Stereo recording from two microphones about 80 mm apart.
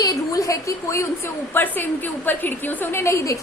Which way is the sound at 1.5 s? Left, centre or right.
Left.